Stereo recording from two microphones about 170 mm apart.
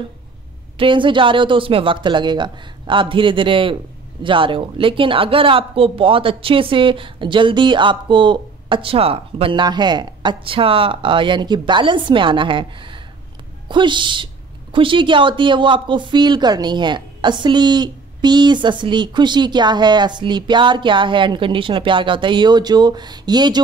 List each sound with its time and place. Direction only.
0.7 s speech: 30° right (ahead or behind)